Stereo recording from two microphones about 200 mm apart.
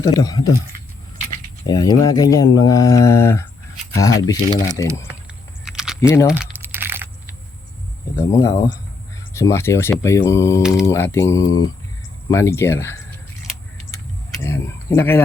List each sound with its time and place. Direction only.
0.0 s speech: 20° left (ahead or behind)
1.6 s speech: 20° left (ahead or behind)
5.6 s a sound: 5° right (ahead or behind)
6.0 s speech: 15° left (ahead or behind)
6.2 s typing: 5° right (ahead or behind)
8.1 s speech: 15° left (ahead or behind)
10.6 s speech: 5° right (ahead or behind)
10.8 s speech: 15° left (ahead or behind)
14.3 s speech: 15° left (ahead or behind)